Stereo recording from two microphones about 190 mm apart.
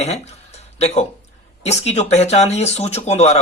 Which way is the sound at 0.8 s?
35° left (ahead or behind).